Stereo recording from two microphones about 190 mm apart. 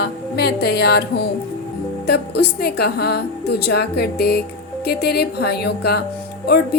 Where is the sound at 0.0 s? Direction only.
55° left (ahead or behind).